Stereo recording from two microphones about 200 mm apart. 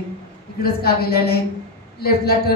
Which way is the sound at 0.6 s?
50° left (ahead or behind).